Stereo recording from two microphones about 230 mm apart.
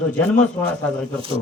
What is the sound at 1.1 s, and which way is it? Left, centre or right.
Speech, right.